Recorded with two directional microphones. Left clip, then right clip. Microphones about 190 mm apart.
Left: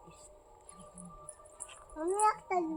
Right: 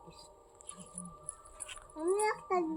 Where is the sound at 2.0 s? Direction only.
10° right (ahead or behind).